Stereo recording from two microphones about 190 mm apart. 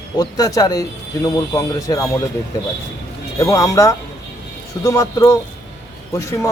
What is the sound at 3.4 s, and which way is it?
Speech, 15° left (ahead or behind).